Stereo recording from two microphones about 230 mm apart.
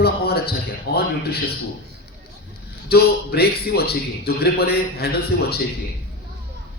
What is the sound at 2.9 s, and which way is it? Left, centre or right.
A man's voice, left.